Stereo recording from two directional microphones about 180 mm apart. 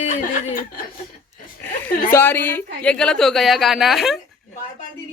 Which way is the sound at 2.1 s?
10° left (ahead or behind).